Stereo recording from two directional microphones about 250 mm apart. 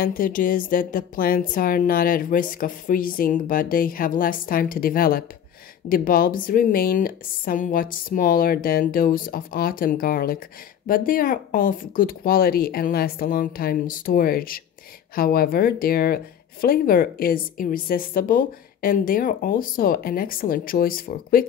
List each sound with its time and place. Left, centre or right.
0.0 s a woman's voice: left